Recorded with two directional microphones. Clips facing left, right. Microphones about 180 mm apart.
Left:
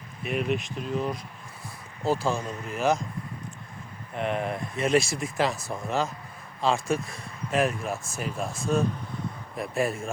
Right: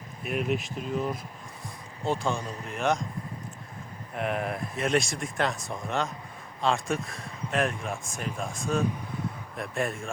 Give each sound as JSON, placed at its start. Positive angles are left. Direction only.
{"t": 0.2, "sound": "speech", "side_deg": 0}
{"t": 4.1, "sound": "speech", "side_deg": 0}